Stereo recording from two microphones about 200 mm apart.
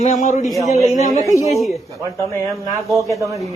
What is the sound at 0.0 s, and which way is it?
Speech, 40° left (ahead or behind).